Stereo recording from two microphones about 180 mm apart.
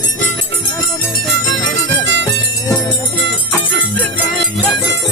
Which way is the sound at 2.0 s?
90° right.